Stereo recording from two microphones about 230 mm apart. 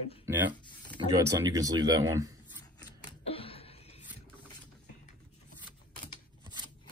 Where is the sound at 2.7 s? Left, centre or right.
Left.